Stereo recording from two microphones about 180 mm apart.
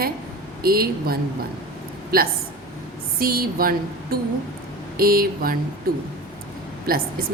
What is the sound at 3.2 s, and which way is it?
Speech, 55° right (ahead or behind).